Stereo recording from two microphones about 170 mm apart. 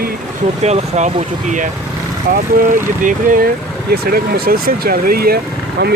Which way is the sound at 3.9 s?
65° right (ahead or behind).